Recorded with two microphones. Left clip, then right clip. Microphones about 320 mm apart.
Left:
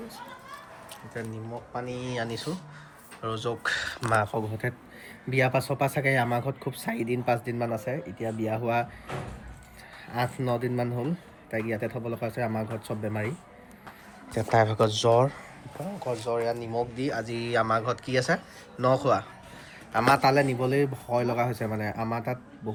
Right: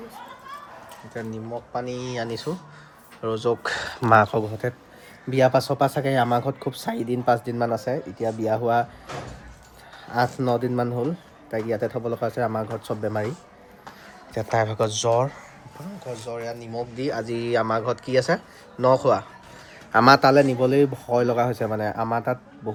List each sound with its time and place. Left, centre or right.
1.1 s speech: centre; by 4.4 s right
5.3 s speech: centre
10.1 s speech: centre
14.3 s speech: centre
17.0 s speech: centre
19.9 s speech: right
20.2 s speech: centre